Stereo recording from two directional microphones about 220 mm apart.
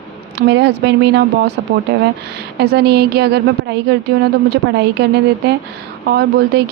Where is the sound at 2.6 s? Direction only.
45° right (ahead or behind).